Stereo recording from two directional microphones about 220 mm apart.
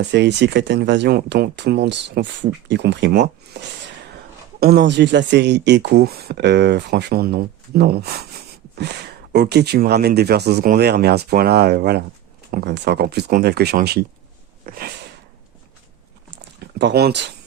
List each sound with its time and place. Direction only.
0.1 s speech: 50° right (ahead or behind)
14.6 s a sound: 40° right (ahead or behind)
16.6 s speech: 50° right (ahead or behind)